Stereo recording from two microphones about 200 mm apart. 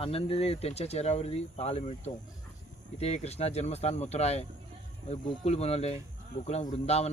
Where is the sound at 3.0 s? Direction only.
30° left (ahead or behind).